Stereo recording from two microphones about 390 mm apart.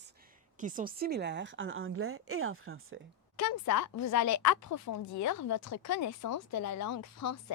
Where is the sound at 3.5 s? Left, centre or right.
Left.